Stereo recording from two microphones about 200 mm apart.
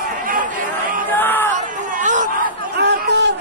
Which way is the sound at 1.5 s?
40° right (ahead or behind).